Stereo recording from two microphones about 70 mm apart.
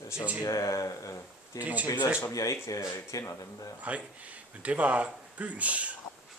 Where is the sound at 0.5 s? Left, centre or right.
Left.